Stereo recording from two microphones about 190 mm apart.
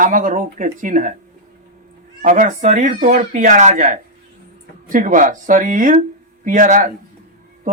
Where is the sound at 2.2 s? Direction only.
45° right (ahead or behind).